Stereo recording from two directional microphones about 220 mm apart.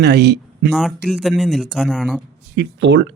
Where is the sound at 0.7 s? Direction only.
Centre (ahead or behind).